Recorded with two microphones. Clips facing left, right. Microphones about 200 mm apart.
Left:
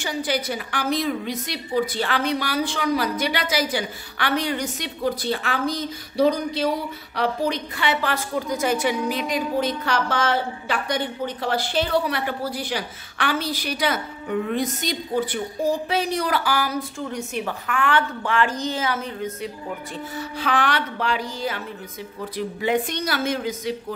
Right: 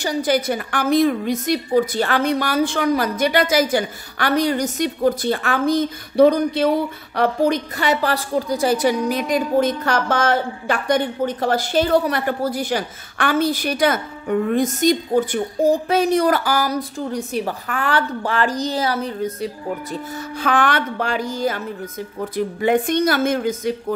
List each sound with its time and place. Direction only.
0.0 s a woman's voice: 40° right (ahead or behind)